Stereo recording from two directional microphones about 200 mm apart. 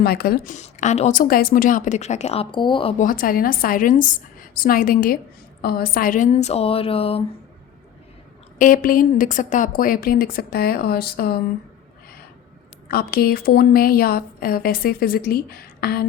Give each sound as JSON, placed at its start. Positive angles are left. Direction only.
{"t": 0.0, "sound": "a woman's voice", "side_deg": 50}
{"t": 3.0, "sound": "a woman's voice", "side_deg": 45}
{"t": 8.5, "sound": "a woman's voice", "side_deg": 40}
{"t": 12.9, "sound": "a woman's voice", "side_deg": 50}